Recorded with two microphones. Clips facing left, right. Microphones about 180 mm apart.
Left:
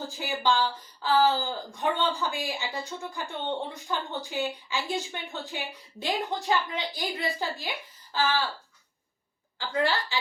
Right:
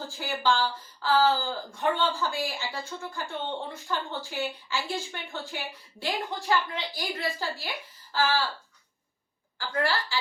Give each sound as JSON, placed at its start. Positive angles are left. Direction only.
{"t": 0.2, "sound": "a woman's voice", "side_deg": 15}
{"t": 9.6, "sound": "a woman's voice", "side_deg": 20}